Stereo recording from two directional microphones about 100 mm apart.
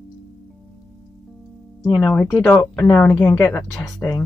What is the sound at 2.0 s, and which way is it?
Speech, 15° left (ahead or behind).